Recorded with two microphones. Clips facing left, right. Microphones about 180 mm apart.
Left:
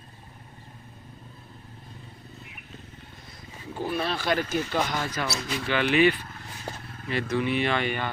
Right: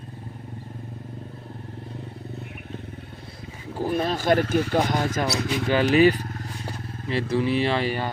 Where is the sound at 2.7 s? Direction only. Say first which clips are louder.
Right 9 dB; 60° right (ahead or behind).